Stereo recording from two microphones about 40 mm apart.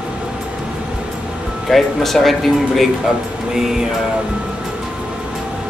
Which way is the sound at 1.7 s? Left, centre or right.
Centre.